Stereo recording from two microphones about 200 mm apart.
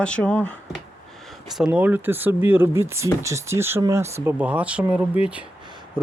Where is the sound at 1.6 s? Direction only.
5° right (ahead or behind).